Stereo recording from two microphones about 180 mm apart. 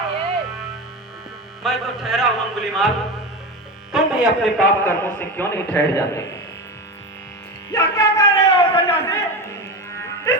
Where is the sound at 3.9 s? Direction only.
Centre (ahead or behind).